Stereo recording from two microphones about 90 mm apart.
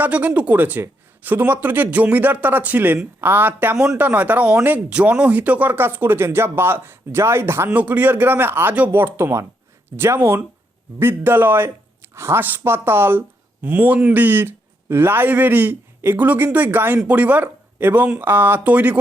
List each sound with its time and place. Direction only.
0.0 s speech: 15° right (ahead or behind)
7.7 s speech: 15° right (ahead or behind)